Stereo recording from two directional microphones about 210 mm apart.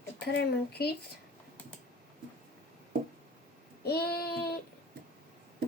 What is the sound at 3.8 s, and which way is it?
Speech, 50° left (ahead or behind).